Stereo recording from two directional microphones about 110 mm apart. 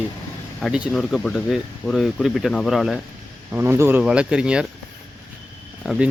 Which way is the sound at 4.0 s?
10° right (ahead or behind).